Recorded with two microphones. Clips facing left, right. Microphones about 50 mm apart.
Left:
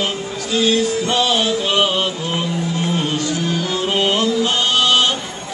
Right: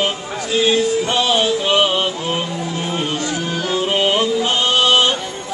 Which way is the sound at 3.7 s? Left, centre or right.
Centre.